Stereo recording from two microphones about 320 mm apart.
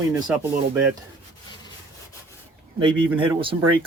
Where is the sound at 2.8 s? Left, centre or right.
Centre.